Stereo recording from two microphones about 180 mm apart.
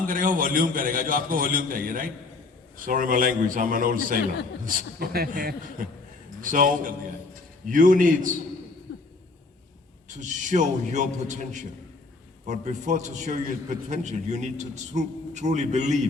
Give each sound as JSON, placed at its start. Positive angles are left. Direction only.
{"t": 0.0, "sound": "a man's voice", "side_deg": -50}
{"t": 10.2, "sound": "a man's voice", "side_deg": -45}